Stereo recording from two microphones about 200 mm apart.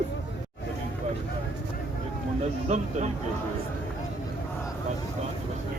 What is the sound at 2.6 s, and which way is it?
Speech, 35° right (ahead or behind).